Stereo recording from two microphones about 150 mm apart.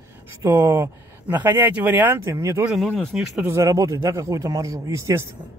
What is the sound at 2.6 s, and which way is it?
Speech, centre (ahead or behind).